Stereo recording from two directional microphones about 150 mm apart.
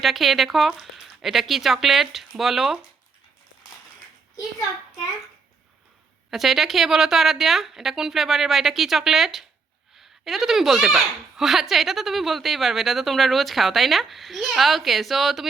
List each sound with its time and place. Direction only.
0.0 s speech: centre (ahead or behind)
6.3 s speech: centre (ahead or behind)